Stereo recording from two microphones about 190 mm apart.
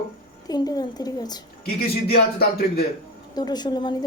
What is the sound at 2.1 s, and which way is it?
Speech, 55° left (ahead or behind).